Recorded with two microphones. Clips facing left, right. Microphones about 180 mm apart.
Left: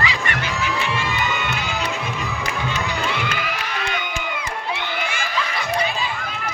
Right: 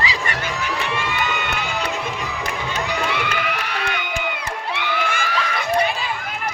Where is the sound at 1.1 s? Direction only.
65° right (ahead or behind).